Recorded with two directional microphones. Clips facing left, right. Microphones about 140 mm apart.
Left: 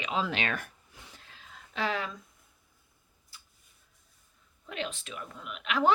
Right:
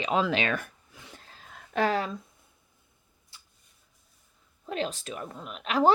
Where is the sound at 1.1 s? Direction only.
40° right (ahead or behind).